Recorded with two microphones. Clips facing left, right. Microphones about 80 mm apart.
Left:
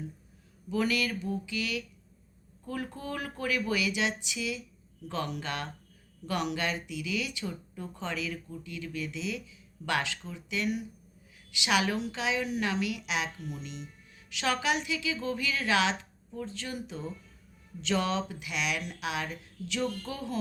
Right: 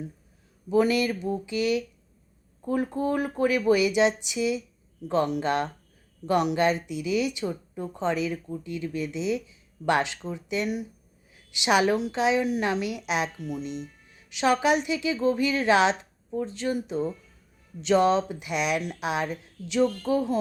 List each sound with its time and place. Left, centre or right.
0.7 s speech: right